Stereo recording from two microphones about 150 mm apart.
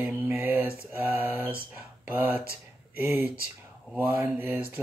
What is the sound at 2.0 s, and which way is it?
Speech, 10° right (ahead or behind).